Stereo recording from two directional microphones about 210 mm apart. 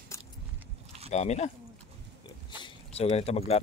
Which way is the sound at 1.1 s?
30° left (ahead or behind).